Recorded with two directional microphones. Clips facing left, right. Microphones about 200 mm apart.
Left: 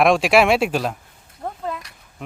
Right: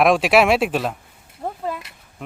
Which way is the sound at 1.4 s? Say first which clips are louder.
Right 1 dB; 5° right (ahead or behind).